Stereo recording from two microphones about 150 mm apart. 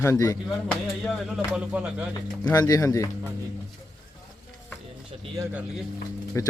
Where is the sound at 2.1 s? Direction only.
25° left (ahead or behind).